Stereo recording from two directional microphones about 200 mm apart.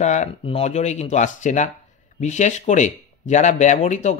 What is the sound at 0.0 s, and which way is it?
Speech, 35° left (ahead or behind).